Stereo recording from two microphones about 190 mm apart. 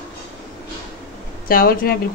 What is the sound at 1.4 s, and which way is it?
Speech, 50° left (ahead or behind).